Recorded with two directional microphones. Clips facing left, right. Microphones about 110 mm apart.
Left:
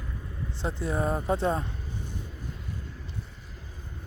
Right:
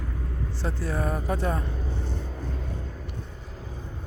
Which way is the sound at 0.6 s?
20° left (ahead or behind).